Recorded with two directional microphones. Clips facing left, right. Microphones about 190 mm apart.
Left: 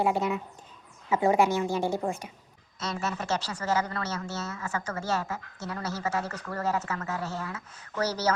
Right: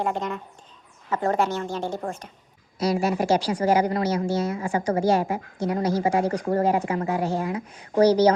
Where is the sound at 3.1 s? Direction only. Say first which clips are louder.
Right 9 dB; 10° right (ahead or behind).